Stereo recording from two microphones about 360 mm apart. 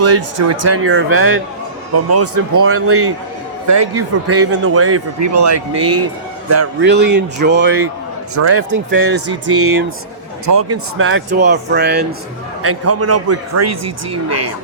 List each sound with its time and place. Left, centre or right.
0.0 s a man's voice: right
6.8 s speech: right
8.4 s a man's voice: right
10.4 s speech: right
10.9 s speech: right
12.6 s speech: right